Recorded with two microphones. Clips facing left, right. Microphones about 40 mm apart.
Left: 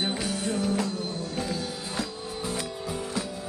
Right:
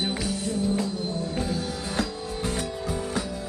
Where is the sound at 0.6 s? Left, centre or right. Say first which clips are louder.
Right 2 dB; left.